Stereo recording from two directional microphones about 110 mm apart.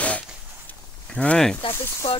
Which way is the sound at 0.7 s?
10° left (ahead or behind).